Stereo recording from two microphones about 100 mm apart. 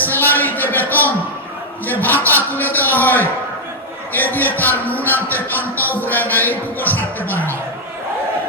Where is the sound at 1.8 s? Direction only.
20° left (ahead or behind).